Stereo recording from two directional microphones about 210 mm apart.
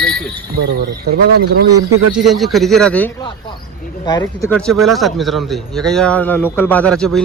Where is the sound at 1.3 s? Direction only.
50° right (ahead or behind).